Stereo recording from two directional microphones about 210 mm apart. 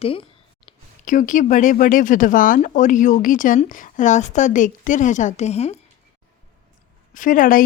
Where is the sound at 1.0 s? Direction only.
40° left (ahead or behind).